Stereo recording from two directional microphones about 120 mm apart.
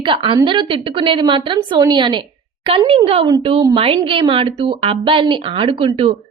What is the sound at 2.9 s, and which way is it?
A woman's voice, 50° right (ahead or behind).